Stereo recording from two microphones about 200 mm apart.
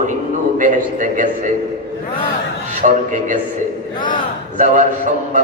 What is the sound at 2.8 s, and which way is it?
Speech, 40° right (ahead or behind).